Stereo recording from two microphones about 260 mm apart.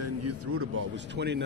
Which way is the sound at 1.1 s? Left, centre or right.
Right.